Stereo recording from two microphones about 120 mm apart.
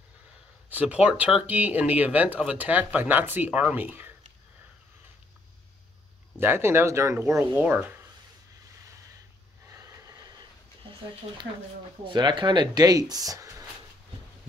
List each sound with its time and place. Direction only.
0.7 s speech: 10° right (ahead or behind)
6.3 s speech: 20° right (ahead or behind)
9.7 s snort: 30° right (ahead or behind)
12.0 s speech: 40° right (ahead or behind)